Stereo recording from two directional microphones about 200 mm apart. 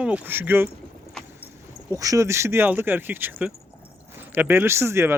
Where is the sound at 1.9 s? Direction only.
15° right (ahead or behind).